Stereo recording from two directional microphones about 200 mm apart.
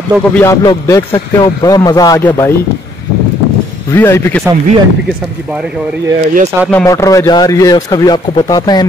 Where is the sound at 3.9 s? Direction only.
10° left (ahead or behind).